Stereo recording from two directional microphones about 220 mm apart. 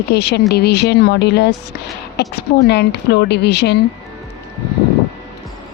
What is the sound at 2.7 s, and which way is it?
Speech, 50° left (ahead or behind).